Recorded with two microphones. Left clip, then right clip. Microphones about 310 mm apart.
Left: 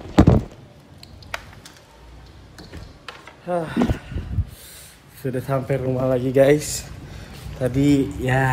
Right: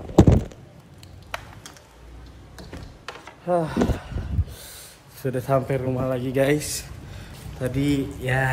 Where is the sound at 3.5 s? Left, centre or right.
Centre.